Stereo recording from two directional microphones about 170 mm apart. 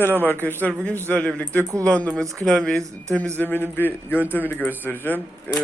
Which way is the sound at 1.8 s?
5° left (ahead or behind).